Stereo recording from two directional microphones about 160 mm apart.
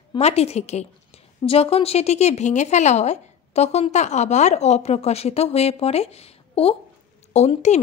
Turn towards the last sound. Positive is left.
turn(degrees=45)  # may be behind; listen again after turning